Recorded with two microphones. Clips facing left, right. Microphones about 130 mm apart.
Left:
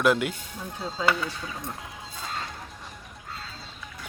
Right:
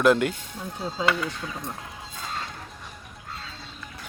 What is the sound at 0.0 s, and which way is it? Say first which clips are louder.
Speech: right 3 dB; 5° left (ahead or behind).